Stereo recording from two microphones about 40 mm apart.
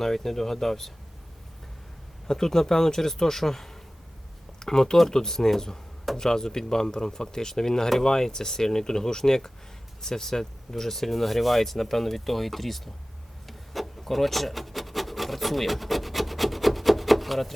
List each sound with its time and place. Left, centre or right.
0.0 s speech: centre
2.2 s speech: centre
13.5 s rub: centre